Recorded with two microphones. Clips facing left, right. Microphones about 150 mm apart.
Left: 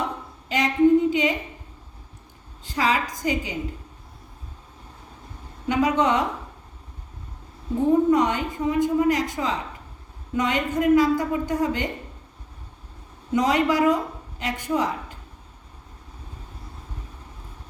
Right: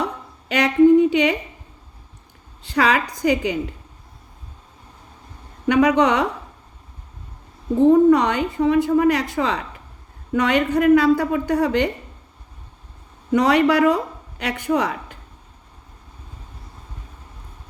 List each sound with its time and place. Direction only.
0.0 s a sound: 70° right (ahead or behind)
2.6 s a woman's voice: 70° right (ahead or behind)
5.6 s a woman's voice: 70° right (ahead or behind)
7.9 s a woman's voice: 70° right (ahead or behind)
13.3 s a woman's voice: 65° right (ahead or behind)